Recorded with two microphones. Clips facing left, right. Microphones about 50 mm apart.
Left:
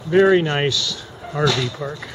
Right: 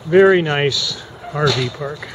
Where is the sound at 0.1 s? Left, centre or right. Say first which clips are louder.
Right 3 dB; centre.